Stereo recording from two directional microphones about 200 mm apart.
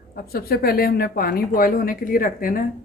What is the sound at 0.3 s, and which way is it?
A woman's voice, 50° left (ahead or behind).